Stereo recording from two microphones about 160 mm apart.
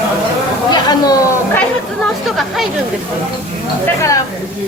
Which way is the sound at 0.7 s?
25° left (ahead or behind).